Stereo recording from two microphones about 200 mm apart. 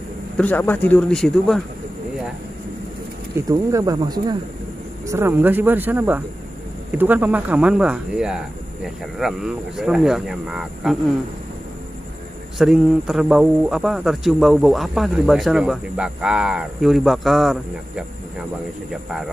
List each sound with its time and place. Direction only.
0.4 s speech: 10° left (ahead or behind)
3.3 s a man's voice: 15° right (ahead or behind)
12.5 s a man's voice: centre (ahead or behind)